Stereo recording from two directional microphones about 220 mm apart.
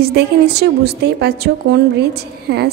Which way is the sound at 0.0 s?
45° right (ahead or behind).